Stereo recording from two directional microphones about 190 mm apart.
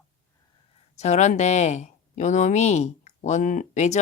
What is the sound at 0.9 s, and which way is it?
Speech, 35° left (ahead or behind).